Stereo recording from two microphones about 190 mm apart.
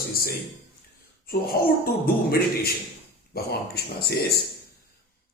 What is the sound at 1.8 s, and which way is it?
Mantra, 50° left (ahead or behind).